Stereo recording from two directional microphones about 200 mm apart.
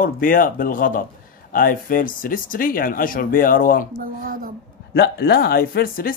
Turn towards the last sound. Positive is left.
turn(degrees=45)  # may be behind; listen again after turning